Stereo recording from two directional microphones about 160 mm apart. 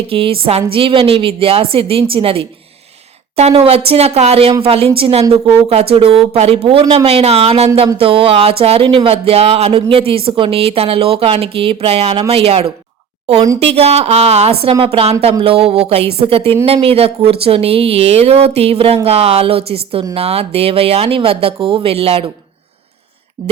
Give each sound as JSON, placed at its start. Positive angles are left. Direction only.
{"t": 0.1, "sound": "speech", "side_deg": -35}